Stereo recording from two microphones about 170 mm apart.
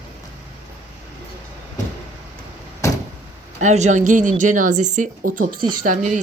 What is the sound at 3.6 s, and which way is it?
Speech, 45° right (ahead or behind).